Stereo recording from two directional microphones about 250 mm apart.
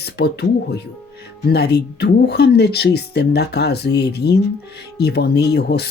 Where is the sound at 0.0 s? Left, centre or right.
Left.